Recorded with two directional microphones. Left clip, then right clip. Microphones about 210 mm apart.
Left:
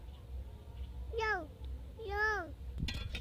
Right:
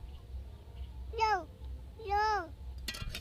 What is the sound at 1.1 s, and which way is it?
A child's voice, 25° right (ahead or behind).